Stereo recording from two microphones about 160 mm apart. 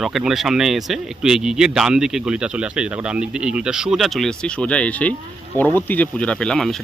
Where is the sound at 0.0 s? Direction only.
Centre (ahead or behind).